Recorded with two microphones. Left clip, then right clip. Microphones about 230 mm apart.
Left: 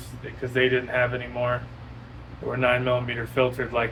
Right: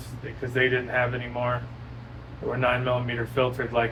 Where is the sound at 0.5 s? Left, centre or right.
Left.